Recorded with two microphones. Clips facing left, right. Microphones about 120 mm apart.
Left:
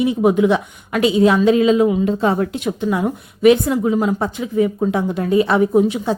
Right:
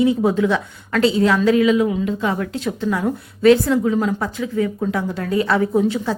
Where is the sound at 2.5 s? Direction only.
20° left (ahead or behind).